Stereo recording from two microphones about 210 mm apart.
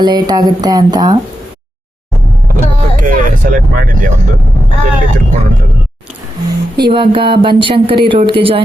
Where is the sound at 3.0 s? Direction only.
40° right (ahead or behind).